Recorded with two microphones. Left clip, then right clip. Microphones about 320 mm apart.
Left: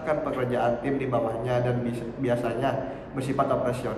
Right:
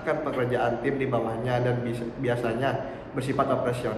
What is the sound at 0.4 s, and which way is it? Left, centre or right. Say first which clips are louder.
A man's voice: even; centre.